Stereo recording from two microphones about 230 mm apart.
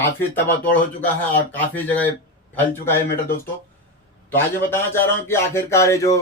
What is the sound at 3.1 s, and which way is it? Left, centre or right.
Speech, left.